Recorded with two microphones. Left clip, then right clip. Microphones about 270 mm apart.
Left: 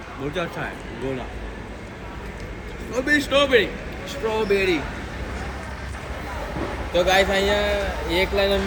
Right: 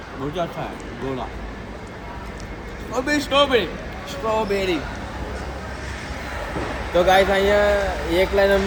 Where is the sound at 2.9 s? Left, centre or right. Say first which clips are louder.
Left 1 dB; right.